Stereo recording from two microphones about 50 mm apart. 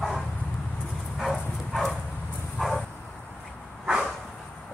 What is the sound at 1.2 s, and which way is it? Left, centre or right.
Dog, centre.